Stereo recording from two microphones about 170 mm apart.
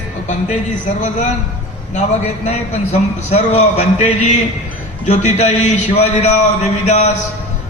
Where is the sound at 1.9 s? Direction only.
45° left (ahead or behind).